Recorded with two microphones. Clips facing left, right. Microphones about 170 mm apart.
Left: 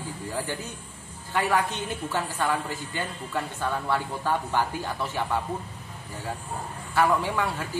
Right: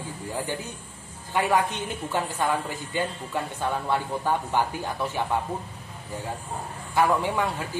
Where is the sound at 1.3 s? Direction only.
15° right (ahead or behind).